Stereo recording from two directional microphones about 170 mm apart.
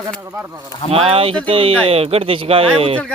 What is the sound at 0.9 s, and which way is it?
Speech, 35° right (ahead or behind).